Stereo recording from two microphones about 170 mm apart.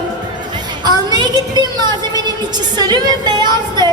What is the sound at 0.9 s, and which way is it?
Speech, 25° right (ahead or behind).